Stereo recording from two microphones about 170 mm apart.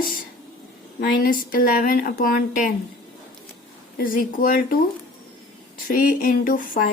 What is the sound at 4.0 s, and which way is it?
Speech, 55° left (ahead or behind).